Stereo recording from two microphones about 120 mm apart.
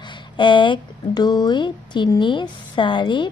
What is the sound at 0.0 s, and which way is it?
Speech, 40° left (ahead or behind).